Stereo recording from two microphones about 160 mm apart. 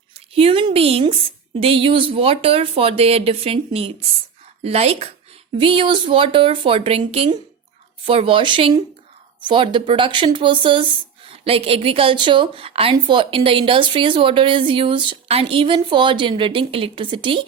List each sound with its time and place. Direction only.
0.3 s speech: 35° right (ahead or behind)